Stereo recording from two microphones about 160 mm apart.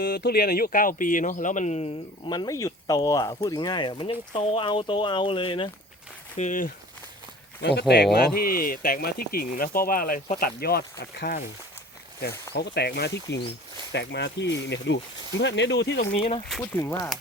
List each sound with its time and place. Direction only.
0.0 s speech: 85° left; by 2.3 s 45° left (ahead or behind)
2.3 s speech: 20° left (ahead or behind)
6.3 s speech: 50° left (ahead or behind)
7.6 s speech: 90° left
8.4 s speech: 65° left (ahead or behind); by 11.3 s 85° left
12.5 s speech: 90° left
16.1 s speech: 35° left (ahead or behind)
16.5 s speech: 10° left (ahead or behind)